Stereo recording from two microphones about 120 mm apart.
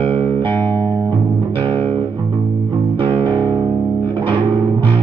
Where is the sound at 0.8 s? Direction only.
15° left (ahead or behind).